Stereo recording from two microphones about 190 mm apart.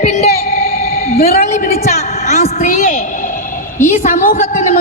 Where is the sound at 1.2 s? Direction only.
40° left (ahead or behind).